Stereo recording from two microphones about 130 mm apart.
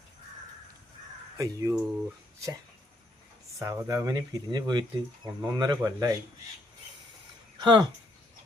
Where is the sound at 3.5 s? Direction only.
25° right (ahead or behind).